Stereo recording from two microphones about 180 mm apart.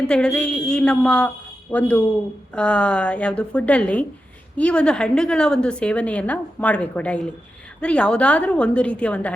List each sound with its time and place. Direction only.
0.1 s a woman's voice: 5° left (ahead or behind)